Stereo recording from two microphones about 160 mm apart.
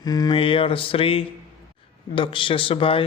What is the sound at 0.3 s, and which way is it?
A man's voice, 35° left (ahead or behind).